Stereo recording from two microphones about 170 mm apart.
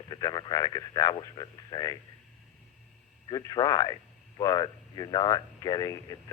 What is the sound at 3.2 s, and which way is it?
Speech, 25° left (ahead or behind).